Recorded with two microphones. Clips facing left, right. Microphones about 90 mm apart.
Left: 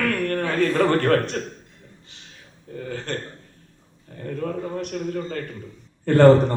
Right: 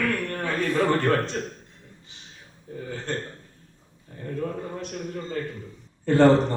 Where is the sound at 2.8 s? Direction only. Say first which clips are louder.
Left 2 dB; 65° left (ahead or behind).